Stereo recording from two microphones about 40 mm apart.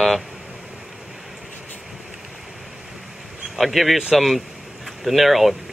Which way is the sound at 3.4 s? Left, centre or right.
Centre.